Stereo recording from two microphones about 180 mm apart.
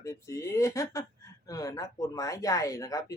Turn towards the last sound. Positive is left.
turn(degrees=20)  # may be behind; listen again after turning